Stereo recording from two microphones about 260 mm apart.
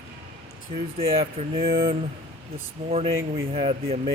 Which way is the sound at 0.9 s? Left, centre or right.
Right.